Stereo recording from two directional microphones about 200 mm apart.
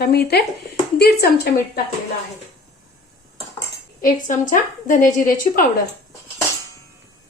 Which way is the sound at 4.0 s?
40° left (ahead or behind).